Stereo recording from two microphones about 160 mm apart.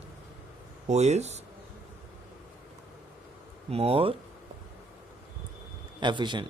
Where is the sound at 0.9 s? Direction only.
45° right (ahead or behind).